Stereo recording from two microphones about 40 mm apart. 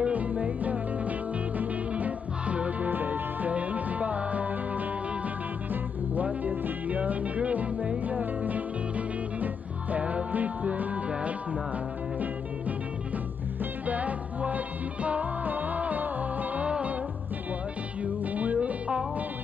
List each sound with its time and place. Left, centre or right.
0.0 s music: right
2.9 s music: right
6.2 s music: right
16.6 s music: right
18.0 s music: right